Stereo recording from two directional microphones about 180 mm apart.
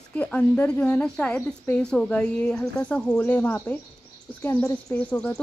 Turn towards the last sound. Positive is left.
turn(degrees=5)  # may be behind; listen again after turning